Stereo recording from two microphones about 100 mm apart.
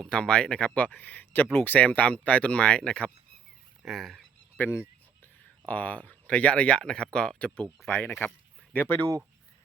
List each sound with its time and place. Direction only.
0.1 s speech: 10° left (ahead or behind)
3.8 s speech: centre (ahead or behind)
4.6 s speech: 20° left (ahead or behind)